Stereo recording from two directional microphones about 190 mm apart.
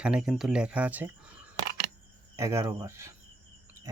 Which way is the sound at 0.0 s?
5° right (ahead or behind).